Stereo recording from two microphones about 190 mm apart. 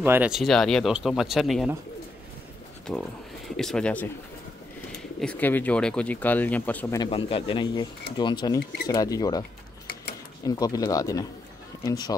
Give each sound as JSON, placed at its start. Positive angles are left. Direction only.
{"t": 0.0, "sound": "speech", "side_deg": -10}
{"t": 2.9, "sound": "speech", "side_deg": 5}
{"t": 5.2, "sound": "speech", "side_deg": 10}
{"t": 7.0, "sound": "speech", "side_deg": 30}
{"t": 10.4, "sound": "speech", "side_deg": 20}